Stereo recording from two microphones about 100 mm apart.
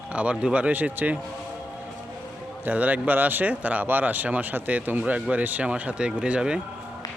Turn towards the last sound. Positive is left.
turn(degrees=-10)  # may be behind; listen again after turning